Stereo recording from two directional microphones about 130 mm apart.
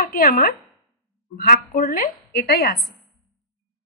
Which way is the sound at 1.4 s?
90° left.